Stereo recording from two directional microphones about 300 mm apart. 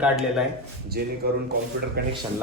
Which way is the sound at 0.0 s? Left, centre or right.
Centre.